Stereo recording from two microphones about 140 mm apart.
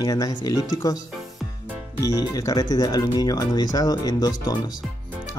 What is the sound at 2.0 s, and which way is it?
Speech, 25° left (ahead or behind).